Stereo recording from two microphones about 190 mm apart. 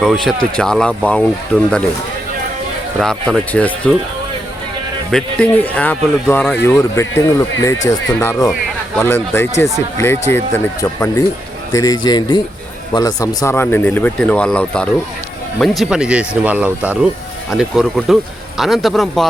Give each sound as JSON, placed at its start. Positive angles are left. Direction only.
{"t": 0.0, "sound": "speech", "side_deg": 0}
{"t": 3.0, "sound": "speech", "side_deg": 5}
{"t": 5.1, "sound": "a man's voice", "side_deg": 5}